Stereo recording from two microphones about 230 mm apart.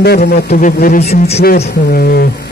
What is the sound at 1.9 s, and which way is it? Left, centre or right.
Speech, left.